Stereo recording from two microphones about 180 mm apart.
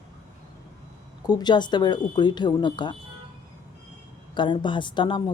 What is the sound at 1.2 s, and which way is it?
Speech, 25° left (ahead or behind).